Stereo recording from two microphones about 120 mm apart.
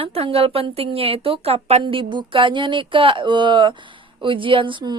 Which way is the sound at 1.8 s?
45° right (ahead or behind).